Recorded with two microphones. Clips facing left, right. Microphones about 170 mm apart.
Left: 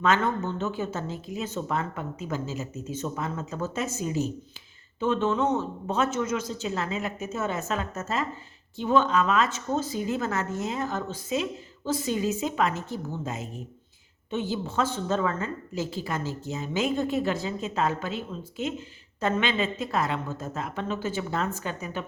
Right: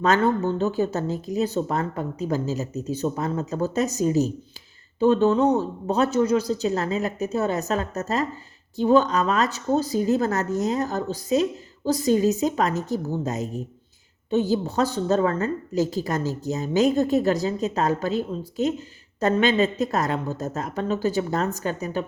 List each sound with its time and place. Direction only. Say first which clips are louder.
0.0 s a woman's voice: right 5 dB; 35° right (ahead or behind)